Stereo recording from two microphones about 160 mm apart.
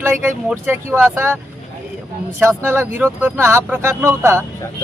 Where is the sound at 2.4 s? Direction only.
15° right (ahead or behind).